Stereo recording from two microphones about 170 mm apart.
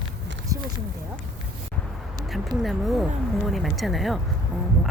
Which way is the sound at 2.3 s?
Centre (ahead or behind).